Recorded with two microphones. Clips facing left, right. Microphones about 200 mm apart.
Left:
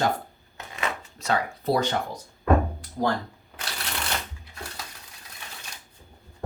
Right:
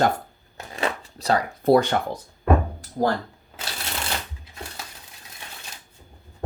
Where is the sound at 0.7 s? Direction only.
35° right (ahead or behind).